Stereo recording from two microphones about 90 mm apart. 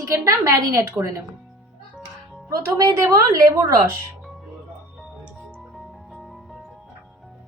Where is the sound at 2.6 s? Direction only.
35° right (ahead or behind).